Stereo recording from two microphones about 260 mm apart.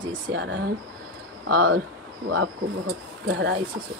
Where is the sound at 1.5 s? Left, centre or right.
Right.